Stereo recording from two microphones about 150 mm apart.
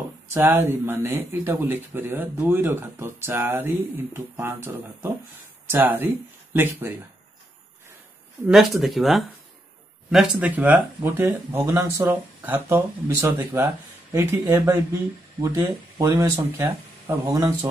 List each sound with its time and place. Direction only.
0.3 s speech: 15° right (ahead or behind)
8.5 s speech: centre (ahead or behind); by 17.6 s 25° right (ahead or behind)